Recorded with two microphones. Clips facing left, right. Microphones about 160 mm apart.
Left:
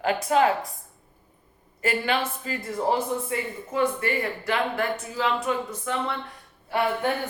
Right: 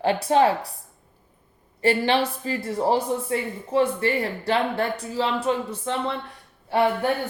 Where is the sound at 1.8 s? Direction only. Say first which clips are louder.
Right 5 dB; 30° right (ahead or behind).